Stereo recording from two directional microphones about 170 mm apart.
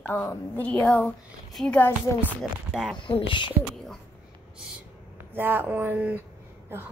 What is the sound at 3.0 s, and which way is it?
Speech, 30° left (ahead or behind).